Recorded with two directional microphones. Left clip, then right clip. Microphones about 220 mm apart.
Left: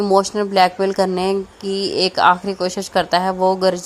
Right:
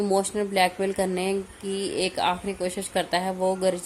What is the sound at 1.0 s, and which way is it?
A woman's voice, 20° left (ahead or behind).